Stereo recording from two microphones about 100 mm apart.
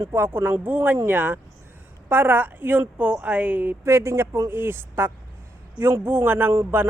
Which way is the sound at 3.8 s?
30° right (ahead or behind).